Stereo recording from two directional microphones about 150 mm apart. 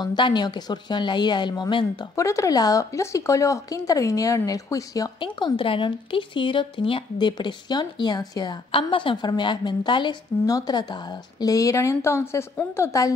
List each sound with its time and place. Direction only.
0.0 s speech: 30° left (ahead or behind)
2.1 s speech: 20° left (ahead or behind)